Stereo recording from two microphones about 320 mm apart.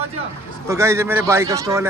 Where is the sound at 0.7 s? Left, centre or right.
Centre.